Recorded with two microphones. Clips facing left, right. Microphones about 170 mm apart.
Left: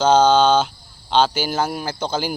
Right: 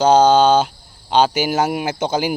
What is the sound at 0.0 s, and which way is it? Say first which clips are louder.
Speech: right 2 dB; 10° right (ahead or behind).